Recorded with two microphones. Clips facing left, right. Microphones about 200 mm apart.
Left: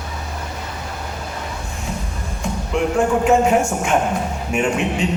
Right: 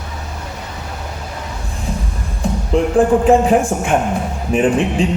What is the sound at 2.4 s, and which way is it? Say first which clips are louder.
A woman's voice: right 4 dB; 35° right (ahead or behind).